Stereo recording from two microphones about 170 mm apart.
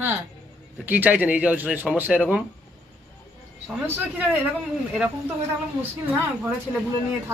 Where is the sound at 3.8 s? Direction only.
10° right (ahead or behind).